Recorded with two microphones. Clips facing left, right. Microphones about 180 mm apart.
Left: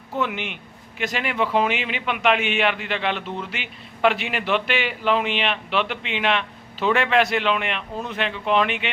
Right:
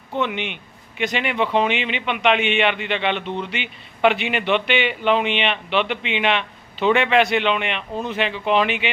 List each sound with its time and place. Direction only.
0.1 s speech: 5° left (ahead or behind)